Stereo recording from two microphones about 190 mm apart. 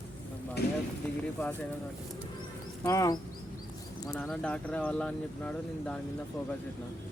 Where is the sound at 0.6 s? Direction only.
60° left (ahead or behind).